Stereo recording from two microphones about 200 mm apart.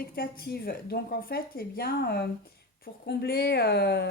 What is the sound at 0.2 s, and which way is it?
A woman's voice, 50° left (ahead or behind).